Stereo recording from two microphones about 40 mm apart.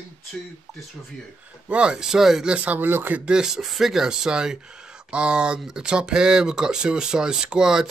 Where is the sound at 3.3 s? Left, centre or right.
Centre.